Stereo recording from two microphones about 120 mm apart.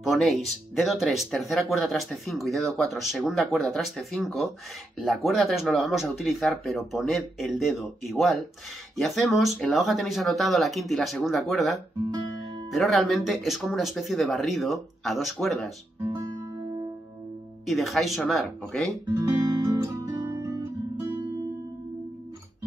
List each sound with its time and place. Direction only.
0.0 s speech: centre (ahead or behind)
12.7 s speech: centre (ahead or behind)
16.0 s guitar: 25° right (ahead or behind)
17.6 s speech: centre (ahead or behind)
19.2 s guitar: 25° right (ahead or behind)